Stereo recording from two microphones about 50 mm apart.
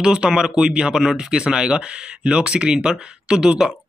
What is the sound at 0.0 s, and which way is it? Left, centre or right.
Speech, centre.